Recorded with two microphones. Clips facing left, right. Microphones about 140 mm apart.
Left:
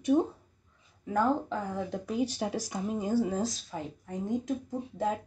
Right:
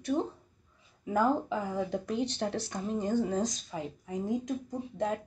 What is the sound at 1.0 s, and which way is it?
Speech, 5° right (ahead or behind).